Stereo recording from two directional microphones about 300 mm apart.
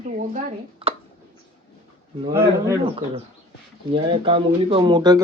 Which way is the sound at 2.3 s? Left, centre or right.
Centre.